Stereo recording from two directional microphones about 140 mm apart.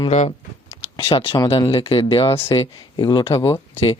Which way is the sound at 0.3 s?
45° left (ahead or behind).